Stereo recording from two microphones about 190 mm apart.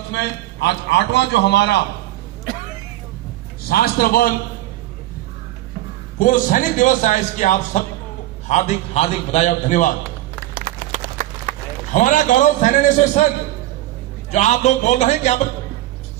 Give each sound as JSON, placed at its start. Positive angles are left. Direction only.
{"t": 0.1, "sound": "a man's voice", "side_deg": 65}
{"t": 3.7, "sound": "a man's voice", "side_deg": 55}
{"t": 6.1, "sound": "a man's voice", "side_deg": 45}
{"t": 10.5, "sound": "a sound", "side_deg": -45}
{"t": 11.9, "sound": "a man's voice", "side_deg": 40}
{"t": 14.3, "sound": "a man's voice", "side_deg": 40}